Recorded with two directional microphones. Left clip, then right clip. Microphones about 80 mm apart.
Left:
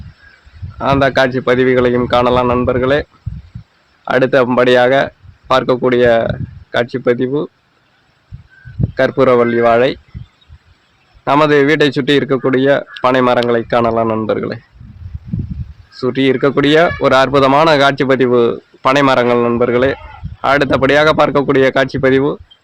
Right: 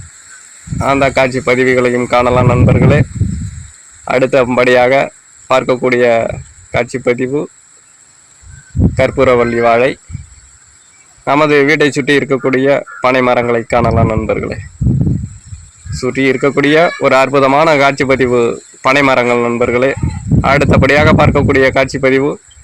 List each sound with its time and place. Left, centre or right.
0.8 s speech: right
4.2 s speech: right
9.0 s speech: right
11.3 s speech: right
15.9 s speech: right